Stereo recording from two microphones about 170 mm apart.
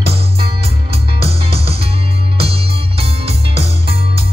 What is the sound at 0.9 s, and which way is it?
Music, 35° right (ahead or behind).